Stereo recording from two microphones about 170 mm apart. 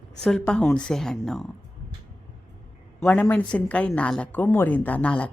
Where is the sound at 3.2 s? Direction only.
10° left (ahead or behind).